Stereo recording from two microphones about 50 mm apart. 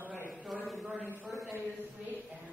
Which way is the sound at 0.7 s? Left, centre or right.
Centre.